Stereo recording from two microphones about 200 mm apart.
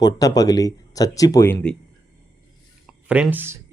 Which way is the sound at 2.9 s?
5° right (ahead or behind).